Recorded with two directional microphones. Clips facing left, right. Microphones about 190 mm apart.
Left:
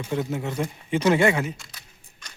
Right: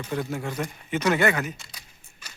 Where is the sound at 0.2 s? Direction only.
20° left (ahead or behind).